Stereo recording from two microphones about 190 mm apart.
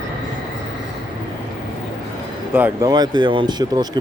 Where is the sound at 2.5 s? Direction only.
15° right (ahead or behind).